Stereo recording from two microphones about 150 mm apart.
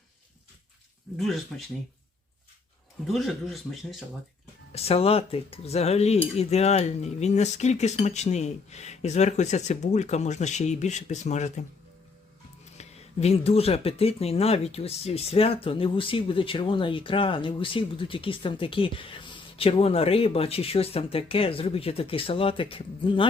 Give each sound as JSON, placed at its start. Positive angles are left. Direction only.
{"t": 1.1, "sound": "speech", "side_deg": 0}
{"t": 3.1, "sound": "speech", "side_deg": 0}
{"t": 4.7, "sound": "speech", "side_deg": 40}
{"t": 12.7, "sound": "speech", "side_deg": 45}